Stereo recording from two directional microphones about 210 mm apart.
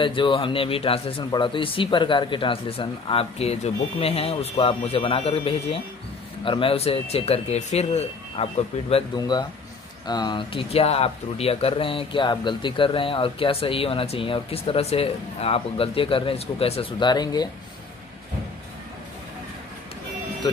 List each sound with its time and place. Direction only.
0.0 s speech: 25° left (ahead or behind)